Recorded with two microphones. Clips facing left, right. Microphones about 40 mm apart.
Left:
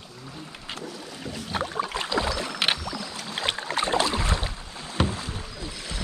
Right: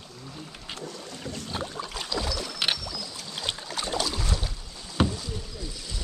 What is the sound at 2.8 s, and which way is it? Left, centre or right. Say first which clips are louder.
Boat: left 4 dB; left.